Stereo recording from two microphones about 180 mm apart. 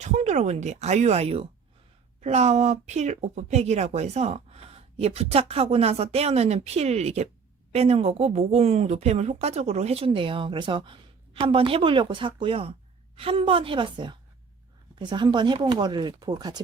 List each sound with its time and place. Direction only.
0.0 s speech: 40° right (ahead or behind); by 16.6 s 20° right (ahead or behind)